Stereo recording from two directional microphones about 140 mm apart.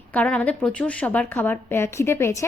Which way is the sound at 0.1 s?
10° left (ahead or behind).